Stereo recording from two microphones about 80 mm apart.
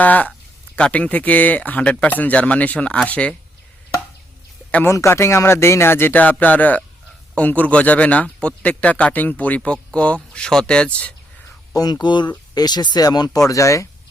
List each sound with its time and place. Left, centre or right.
0.0 s speech: centre
4.9 s speech: left; by 11.1 s centre
11.7 s speech: left
12.5 s speech: left
13.5 s speech: left